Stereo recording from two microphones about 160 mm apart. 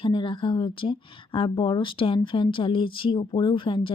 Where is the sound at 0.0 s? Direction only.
30° left (ahead or behind).